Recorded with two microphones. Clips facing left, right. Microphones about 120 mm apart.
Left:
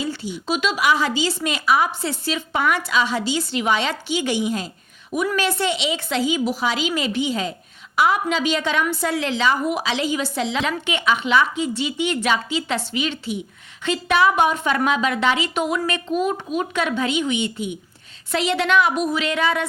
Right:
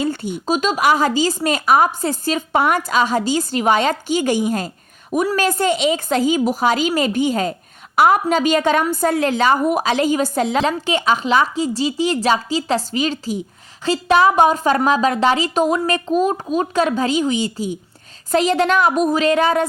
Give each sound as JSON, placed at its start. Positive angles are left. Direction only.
{"t": 0.0, "sound": "a woman's voice", "side_deg": -50}
{"t": 10.7, "sound": "a woman's voice", "side_deg": -35}